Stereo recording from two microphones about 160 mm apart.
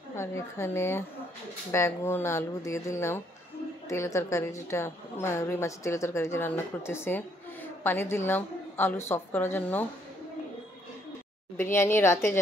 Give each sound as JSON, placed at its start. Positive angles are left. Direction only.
{"t": 0.1, "sound": "a woman's voice", "side_deg": 15}
{"t": 11.5, "sound": "a woman's voice", "side_deg": 15}